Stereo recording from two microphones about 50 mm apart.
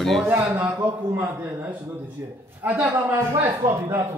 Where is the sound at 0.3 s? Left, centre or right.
Right.